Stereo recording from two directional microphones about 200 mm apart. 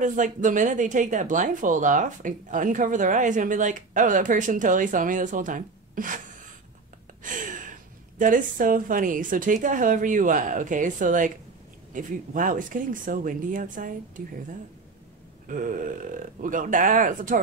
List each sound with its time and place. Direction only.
0.0 s speech: 40° right (ahead or behind)
7.2 s a sound: 40° right (ahead or behind)
8.2 s speech: 40° right (ahead or behind)
15.4 s speech: 40° right (ahead or behind)